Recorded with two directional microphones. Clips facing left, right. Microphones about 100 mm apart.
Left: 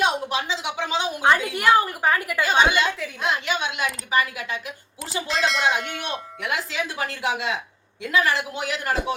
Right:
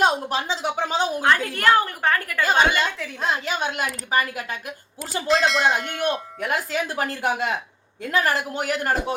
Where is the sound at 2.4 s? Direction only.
40° right (ahead or behind).